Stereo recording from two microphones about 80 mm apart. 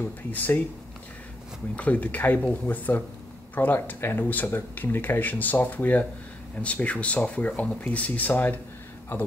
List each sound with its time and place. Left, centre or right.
0.0 s speech: left
1.8 s speech: centre